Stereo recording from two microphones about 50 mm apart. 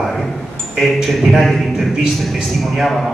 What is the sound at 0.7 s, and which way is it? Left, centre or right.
A man's voice, centre.